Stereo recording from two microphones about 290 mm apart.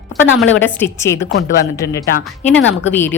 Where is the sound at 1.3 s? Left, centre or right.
Left.